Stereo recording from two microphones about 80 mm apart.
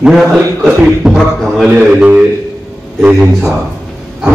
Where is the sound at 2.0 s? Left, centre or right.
Centre.